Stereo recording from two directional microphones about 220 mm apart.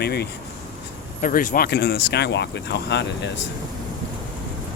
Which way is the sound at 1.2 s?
35° left (ahead or behind).